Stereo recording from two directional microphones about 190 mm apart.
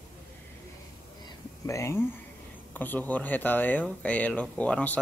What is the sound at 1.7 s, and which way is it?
Speech, 15° left (ahead or behind).